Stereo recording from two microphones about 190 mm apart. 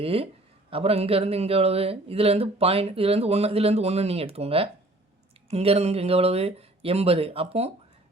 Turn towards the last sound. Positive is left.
turn(degrees=-30)  # may be behind; listen again after turning